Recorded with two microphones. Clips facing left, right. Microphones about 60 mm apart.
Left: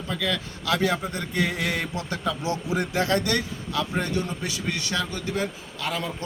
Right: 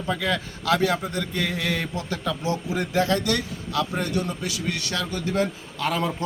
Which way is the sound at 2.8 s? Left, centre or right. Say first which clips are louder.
Right 3 dB; left.